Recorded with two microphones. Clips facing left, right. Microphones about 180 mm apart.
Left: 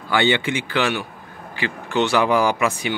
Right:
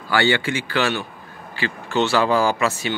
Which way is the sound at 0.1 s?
20° left (ahead or behind).